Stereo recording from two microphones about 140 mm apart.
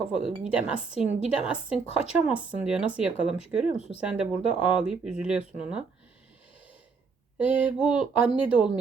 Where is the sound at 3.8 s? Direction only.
45° left (ahead or behind).